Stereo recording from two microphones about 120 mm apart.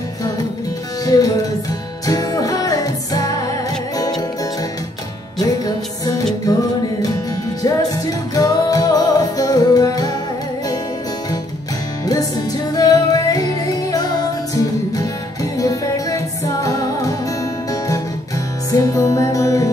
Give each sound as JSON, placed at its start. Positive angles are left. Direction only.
{"t": 1.0, "sound": "music", "side_deg": 30}
{"t": 5.4, "sound": "music", "side_deg": 30}
{"t": 7.6, "sound": "music", "side_deg": 30}
{"t": 12.1, "sound": "music", "side_deg": 30}
{"t": 18.7, "sound": "music", "side_deg": 30}